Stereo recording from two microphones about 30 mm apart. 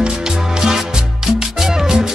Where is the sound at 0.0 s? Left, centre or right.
Right.